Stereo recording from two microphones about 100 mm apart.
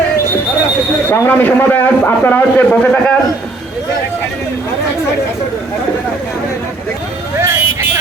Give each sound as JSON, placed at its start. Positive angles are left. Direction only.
{"t": 1.1, "sound": "a man's voice", "side_deg": 20}
{"t": 7.3, "sound": "vehicle", "side_deg": -25}